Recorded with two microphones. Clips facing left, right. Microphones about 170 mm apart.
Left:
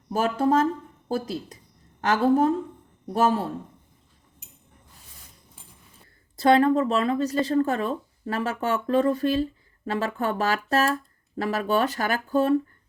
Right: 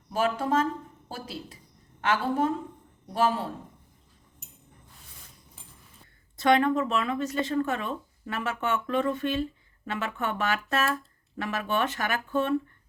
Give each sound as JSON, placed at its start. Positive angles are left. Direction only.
{"t": 0.1, "sound": "a woman's voice", "side_deg": 40}
{"t": 6.3, "sound": "a woman's voice", "side_deg": 35}